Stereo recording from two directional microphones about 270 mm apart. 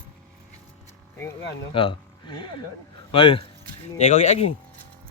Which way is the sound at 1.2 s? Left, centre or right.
Centre.